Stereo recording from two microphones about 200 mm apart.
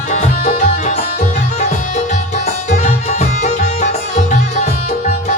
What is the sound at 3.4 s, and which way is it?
Music, 35° left (ahead or behind).